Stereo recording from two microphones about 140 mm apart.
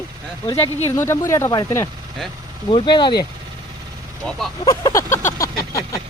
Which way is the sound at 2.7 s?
35° left (ahead or behind).